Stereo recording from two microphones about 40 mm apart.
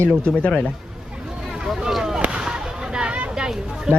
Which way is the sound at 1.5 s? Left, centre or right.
Centre.